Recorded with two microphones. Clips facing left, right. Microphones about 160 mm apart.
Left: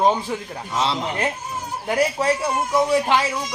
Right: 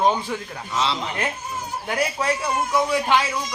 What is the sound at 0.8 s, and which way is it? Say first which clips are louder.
Speech: left 2 dB; 45° left (ahead or behind).